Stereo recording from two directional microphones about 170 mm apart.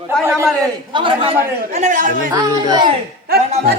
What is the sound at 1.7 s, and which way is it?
Speech, 45° right (ahead or behind).